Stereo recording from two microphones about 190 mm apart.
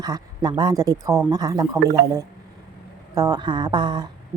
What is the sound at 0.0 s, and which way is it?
Speech, 20° right (ahead or behind).